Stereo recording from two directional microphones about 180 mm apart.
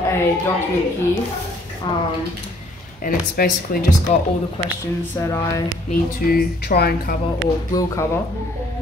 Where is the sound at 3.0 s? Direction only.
55° left (ahead or behind).